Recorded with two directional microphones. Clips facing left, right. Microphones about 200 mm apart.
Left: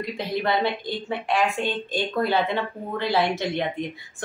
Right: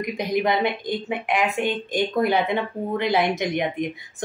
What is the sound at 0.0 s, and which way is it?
Speech, 15° right (ahead or behind).